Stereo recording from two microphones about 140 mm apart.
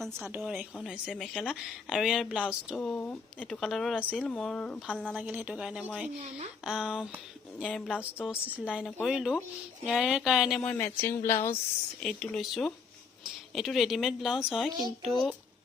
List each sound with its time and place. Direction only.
0.2 s speech: 15° right (ahead or behind)
1.1 s a woman's voice: centre (ahead or behind)
5.1 s a woman's voice: 10° right (ahead or behind)
10.6 s speech: 10° left (ahead or behind)
12.0 s a woman's voice: 5° left (ahead or behind)